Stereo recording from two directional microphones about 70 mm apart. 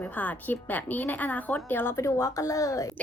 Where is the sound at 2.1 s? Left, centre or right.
Left.